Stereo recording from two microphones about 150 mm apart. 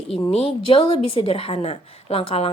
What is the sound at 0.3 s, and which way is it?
A woman's voice, 40° left (ahead or behind).